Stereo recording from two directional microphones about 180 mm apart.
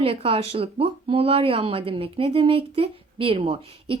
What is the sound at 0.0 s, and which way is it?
Speech, 30° right (ahead or behind).